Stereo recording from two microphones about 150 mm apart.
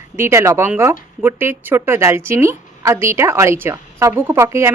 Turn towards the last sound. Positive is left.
turn(degrees=-20)  # may be behind; listen again after turning